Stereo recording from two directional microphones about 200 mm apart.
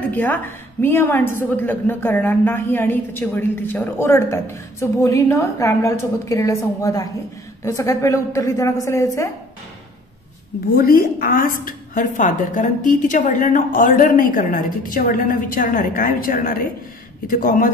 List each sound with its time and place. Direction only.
0.1 s a woman's voice: 10° left (ahead or behind)
10.8 s a woman's voice: 50° left (ahead or behind)